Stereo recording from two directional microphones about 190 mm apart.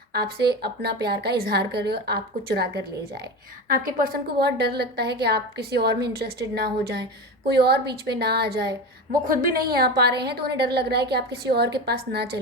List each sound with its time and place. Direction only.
0.1 s a woman's voice: 55° right (ahead or behind)
9.2 s a woman's voice: 45° right (ahead or behind)